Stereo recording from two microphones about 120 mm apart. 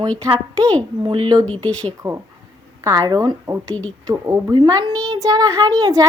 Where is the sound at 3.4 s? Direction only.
25° right (ahead or behind).